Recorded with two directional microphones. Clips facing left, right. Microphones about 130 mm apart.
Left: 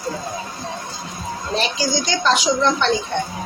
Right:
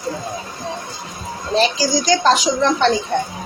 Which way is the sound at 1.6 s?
35° right (ahead or behind).